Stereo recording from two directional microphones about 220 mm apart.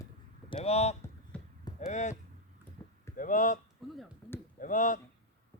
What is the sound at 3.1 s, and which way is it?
Speech, 35° left (ahead or behind).